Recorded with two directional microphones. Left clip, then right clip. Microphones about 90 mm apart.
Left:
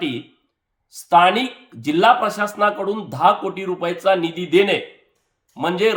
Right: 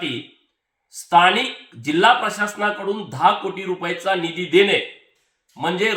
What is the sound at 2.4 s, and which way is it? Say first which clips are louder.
Speech: left 3 dB; 15° left (ahead or behind).